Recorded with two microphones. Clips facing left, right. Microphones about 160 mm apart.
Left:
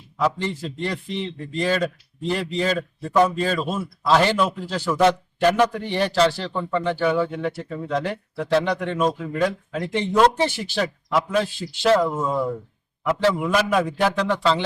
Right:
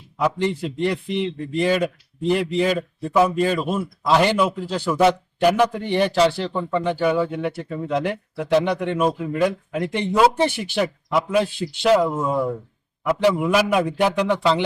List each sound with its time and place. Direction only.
0.2 s speech: 15° right (ahead or behind)
10.5 s speech: 60° right (ahead or behind)
10.8 s speech: 10° right (ahead or behind)